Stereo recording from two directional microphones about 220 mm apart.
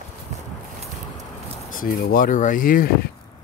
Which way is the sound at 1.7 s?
40° left (ahead or behind).